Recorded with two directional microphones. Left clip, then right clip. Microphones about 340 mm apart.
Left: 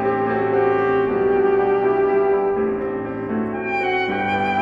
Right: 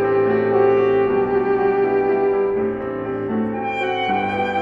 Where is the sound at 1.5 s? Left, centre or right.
Left.